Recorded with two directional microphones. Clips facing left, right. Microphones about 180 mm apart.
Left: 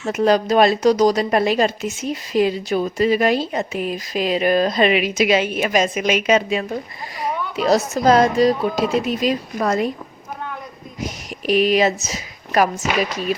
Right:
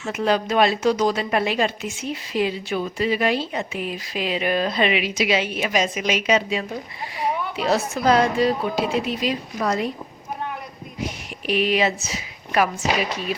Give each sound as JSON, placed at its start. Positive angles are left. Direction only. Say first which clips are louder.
{"t": 0.1, "sound": "a woman's voice", "louder": "left 5 dB", "side_deg": 40}
{"t": 11.0, "sound": "a woman's voice", "louder": "left 3 dB", "side_deg": 40}